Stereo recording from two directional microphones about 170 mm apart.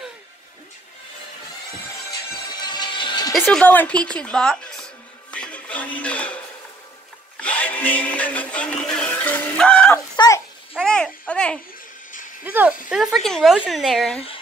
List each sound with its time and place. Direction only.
2.4 s music: 25° left (ahead or behind)
3.3 s a sound: 5° left (ahead or behind)
7.3 s music: 10° left (ahead or behind)
10.1 s babbling: 25° left (ahead or behind)
10.7 s babbling: 5° left (ahead or behind)
12.4 s speech: 10° right (ahead or behind)